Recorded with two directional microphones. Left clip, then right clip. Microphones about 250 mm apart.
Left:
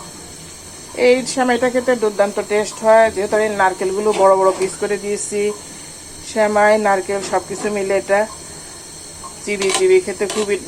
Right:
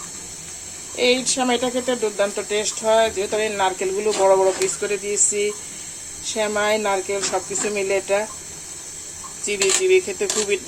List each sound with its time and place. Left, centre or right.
1.4 s speech: centre
9.5 s speech: centre